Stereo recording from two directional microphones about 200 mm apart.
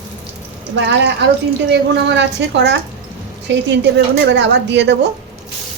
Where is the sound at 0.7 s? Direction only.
60° right (ahead or behind).